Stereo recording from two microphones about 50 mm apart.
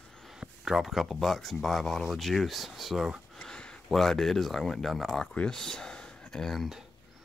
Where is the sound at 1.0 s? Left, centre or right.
Centre.